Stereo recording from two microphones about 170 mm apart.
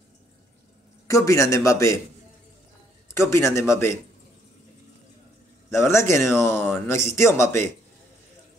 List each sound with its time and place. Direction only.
1.0 s speech: 20° left (ahead or behind)
3.2 s speech: 15° left (ahead or behind)
5.7 s speech: 15° left (ahead or behind)